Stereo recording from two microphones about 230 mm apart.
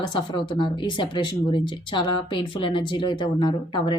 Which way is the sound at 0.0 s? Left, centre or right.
Centre.